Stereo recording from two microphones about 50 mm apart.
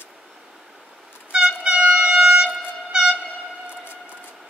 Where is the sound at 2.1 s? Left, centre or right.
Centre.